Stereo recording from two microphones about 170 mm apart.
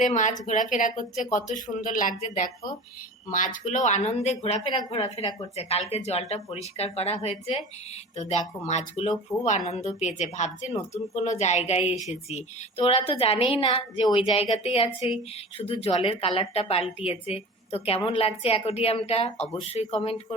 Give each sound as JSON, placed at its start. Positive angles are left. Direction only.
{"t": 0.0, "sound": "a woman's voice", "side_deg": 45}